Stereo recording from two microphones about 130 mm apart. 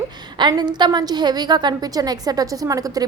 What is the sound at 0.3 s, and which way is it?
A woman's voice, 35° right (ahead or behind).